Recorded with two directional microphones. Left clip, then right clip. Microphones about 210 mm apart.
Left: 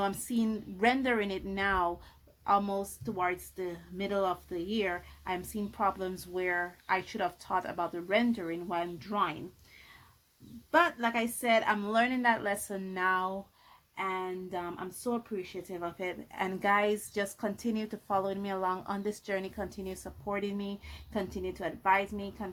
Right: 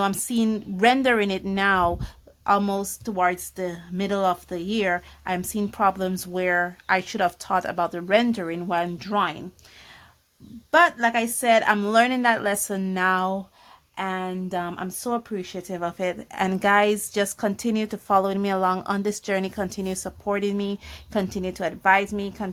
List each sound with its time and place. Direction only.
0.0 s a woman's voice: 40° right (ahead or behind)
10.7 s a woman's voice: 40° right (ahead or behind)